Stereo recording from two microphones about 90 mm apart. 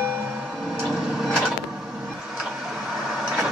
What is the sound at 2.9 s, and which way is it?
Vehicle, 10° right (ahead or behind).